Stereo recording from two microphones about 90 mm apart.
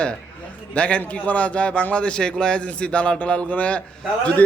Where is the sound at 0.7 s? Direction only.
15° left (ahead or behind).